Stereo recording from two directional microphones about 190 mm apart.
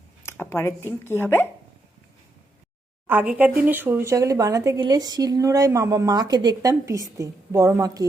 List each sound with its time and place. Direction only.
0.3 s speech: 15° left (ahead or behind)
3.1 s speech: 10° right (ahead or behind)